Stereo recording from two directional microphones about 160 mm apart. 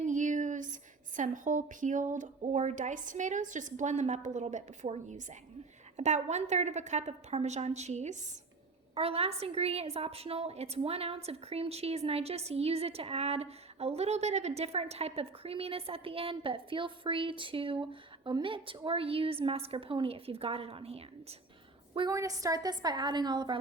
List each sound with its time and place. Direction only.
0.0 s a woman's voice: 50° right (ahead or behind)
21.9 s a woman's voice: 25° right (ahead or behind)